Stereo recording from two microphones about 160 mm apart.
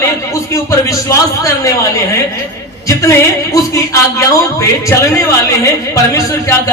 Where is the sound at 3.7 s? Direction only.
20° left (ahead or behind).